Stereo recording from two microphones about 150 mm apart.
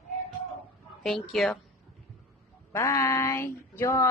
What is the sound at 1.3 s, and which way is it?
Speech, 5° left (ahead or behind).